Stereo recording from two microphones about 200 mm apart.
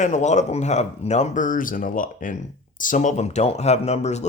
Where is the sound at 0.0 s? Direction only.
35° left (ahead or behind).